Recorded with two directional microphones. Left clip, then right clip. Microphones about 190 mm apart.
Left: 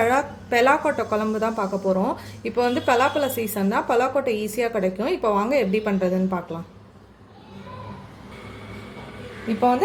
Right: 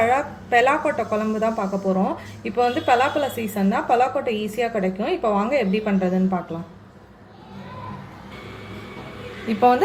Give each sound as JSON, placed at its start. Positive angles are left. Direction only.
{"t": 0.0, "sound": "a woman's voice", "side_deg": 25}
{"t": 9.5, "sound": "a woman's voice", "side_deg": 0}